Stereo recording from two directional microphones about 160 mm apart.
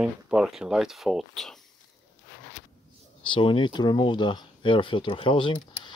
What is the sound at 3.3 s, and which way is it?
Speech, 30° left (ahead or behind).